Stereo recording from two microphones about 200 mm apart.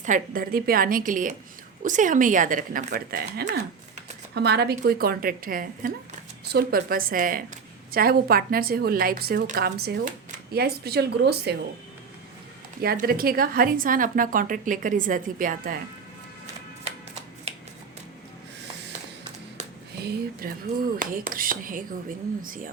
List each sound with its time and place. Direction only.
0.0 s a woman's voice: 40° right (ahead or behind)
12.8 s a woman's voice: 50° right (ahead or behind)
20.0 s a woman's voice: 55° right (ahead or behind)